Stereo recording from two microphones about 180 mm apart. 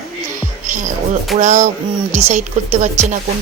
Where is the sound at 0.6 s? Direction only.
45° right (ahead or behind).